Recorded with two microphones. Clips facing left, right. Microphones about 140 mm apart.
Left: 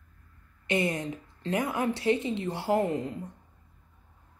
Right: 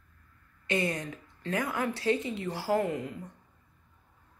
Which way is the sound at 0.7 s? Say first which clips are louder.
Left 2 dB; 25° left (ahead or behind).